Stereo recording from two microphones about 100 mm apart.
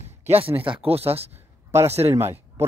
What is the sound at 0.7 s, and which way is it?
Speech, 70° right (ahead or behind).